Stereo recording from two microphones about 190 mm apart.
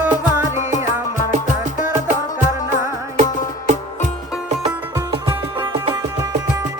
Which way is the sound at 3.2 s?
40° right (ahead or behind).